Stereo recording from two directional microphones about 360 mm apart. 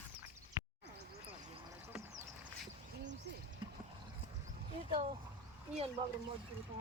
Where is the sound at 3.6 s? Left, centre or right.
Centre.